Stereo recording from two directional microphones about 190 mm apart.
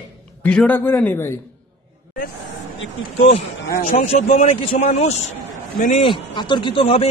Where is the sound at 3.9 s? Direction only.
40° left (ahead or behind).